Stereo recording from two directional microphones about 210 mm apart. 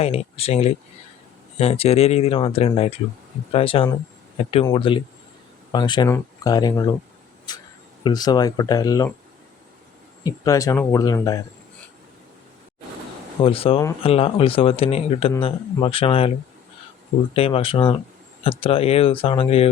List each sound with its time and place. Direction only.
0.0 s speech: 30° left (ahead or behind)
8.0 s speech: 20° left (ahead or behind)
10.2 s speech: 15° left (ahead or behind)
13.4 s speech: 25° left (ahead or behind)
17.3 s speech: 25° left (ahead or behind)